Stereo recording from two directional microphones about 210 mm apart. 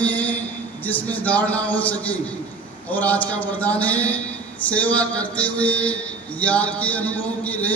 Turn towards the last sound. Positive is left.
turn(degrees=5)  # may be behind; listen again after turning